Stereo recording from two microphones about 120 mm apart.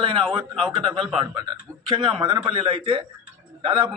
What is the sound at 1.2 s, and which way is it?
A man's voice, 35° right (ahead or behind).